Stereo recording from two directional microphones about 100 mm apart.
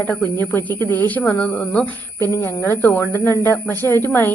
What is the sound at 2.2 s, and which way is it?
Speech, 25° left (ahead or behind).